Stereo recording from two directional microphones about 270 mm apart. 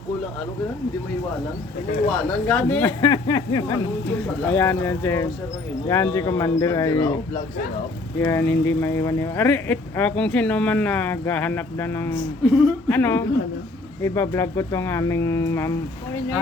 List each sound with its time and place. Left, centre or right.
2.5 s speech: centre
8.2 s speech: centre
12.4 s a woman's voice: centre
12.9 s speech: centre